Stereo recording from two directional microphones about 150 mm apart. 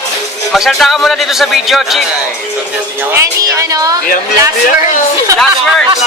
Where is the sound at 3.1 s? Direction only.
20° right (ahead or behind).